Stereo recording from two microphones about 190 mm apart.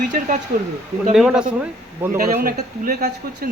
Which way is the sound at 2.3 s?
50° right (ahead or behind).